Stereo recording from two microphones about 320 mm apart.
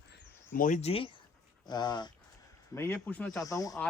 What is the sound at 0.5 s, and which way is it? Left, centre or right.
Speech, left.